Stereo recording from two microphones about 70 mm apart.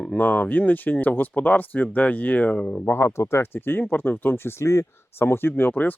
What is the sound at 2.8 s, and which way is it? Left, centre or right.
Speech, left.